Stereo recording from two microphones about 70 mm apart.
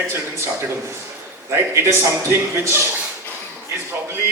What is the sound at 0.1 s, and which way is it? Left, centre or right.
A man's voice, right.